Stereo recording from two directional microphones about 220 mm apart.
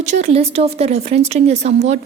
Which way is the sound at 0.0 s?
30° right (ahead or behind).